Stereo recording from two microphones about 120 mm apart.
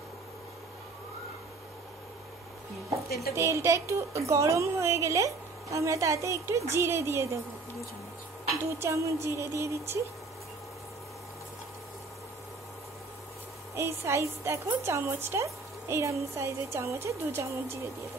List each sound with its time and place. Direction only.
3.3 s speech: 25° right (ahead or behind)
8.5 s speech: 25° right (ahead or behind)
13.7 s speech: 20° right (ahead or behind)